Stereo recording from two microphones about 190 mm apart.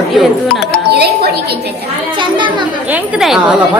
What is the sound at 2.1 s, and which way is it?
Speech, 25° right (ahead or behind).